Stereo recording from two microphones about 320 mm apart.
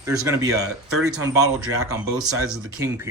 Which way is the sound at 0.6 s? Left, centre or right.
Right.